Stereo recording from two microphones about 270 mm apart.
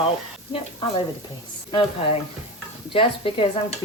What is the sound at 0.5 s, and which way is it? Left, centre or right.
Speech, centre.